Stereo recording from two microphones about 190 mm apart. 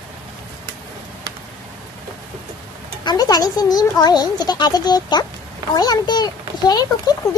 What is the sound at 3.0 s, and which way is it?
A child's voice, 20° left (ahead or behind).